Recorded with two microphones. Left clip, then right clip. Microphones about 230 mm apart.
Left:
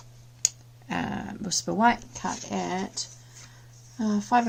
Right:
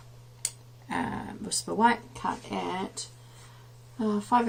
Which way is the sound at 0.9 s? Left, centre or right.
Left.